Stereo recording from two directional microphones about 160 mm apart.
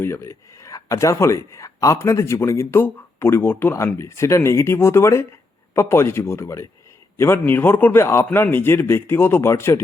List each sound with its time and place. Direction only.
0.0 s speech: 15° left (ahead or behind)